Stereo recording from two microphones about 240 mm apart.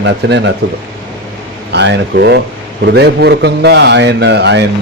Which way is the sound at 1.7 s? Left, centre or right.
Right.